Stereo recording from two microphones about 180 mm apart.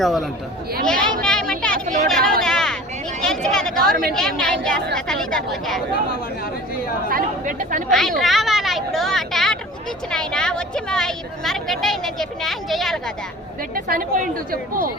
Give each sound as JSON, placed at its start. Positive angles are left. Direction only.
{"t": 0.0, "sound": "a woman's voice", "side_deg": 0}
{"t": 0.9, "sound": "a sound", "side_deg": 5}
{"t": 4.4, "sound": "chatter", "side_deg": 5}
{"t": 7.1, "sound": "chatter", "side_deg": -50}
{"t": 7.9, "sound": "a woman's voice", "side_deg": 0}
{"t": 8.2, "sound": "a sound", "side_deg": 0}
{"t": 10.1, "sound": "a woman's voice", "side_deg": 5}
{"t": 13.7, "sound": "a woman's voice", "side_deg": -55}